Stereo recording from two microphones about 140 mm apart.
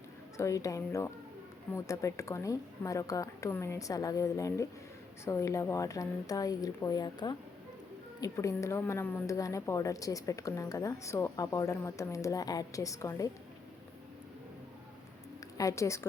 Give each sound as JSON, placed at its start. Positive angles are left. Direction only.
{"t": 0.3, "sound": "a woman's voice", "side_deg": 25}
{"t": 15.5, "sound": "a woman's voice", "side_deg": 20}